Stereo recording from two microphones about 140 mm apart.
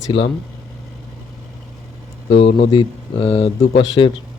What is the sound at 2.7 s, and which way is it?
Speech, 40° left (ahead or behind).